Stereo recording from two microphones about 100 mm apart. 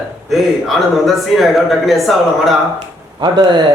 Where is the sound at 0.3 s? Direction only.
Centre (ahead or behind).